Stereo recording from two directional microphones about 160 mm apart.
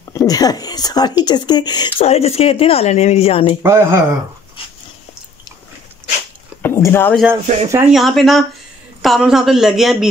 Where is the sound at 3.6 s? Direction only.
15° right (ahead or behind).